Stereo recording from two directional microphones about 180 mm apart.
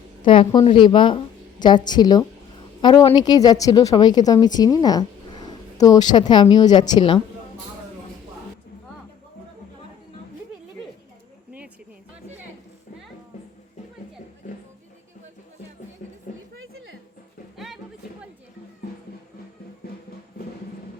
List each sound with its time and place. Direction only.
0.3 s a woman's voice: 30° left (ahead or behind)
16.3 s a sound: 45° left (ahead or behind)
19.8 s music: 60° left (ahead or behind)